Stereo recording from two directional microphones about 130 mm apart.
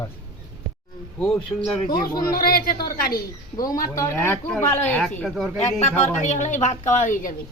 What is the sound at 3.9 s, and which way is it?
Speech, 20° left (ahead or behind).